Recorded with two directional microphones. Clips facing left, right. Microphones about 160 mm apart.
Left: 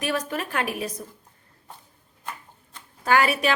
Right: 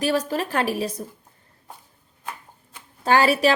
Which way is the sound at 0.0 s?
30° right (ahead or behind).